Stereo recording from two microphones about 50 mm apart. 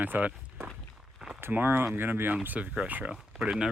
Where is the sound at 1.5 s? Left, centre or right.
Right.